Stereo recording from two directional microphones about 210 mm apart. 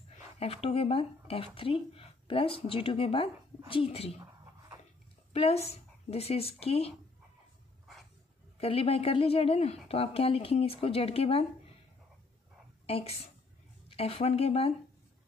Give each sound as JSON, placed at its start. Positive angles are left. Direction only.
{"t": 0.1, "sound": "speech", "side_deg": 30}
{"t": 5.3, "sound": "speech", "side_deg": 30}
{"t": 8.5, "sound": "a woman's voice", "side_deg": 30}
{"t": 12.8, "sound": "a woman's voice", "side_deg": 30}